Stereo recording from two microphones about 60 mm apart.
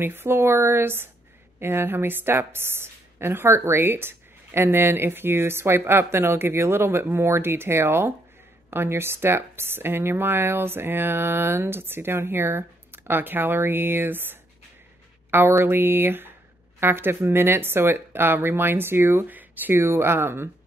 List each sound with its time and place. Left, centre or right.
0.0 s a woman's voice: right
15.6 s a woman's voice: right
19.8 s a woman's voice: right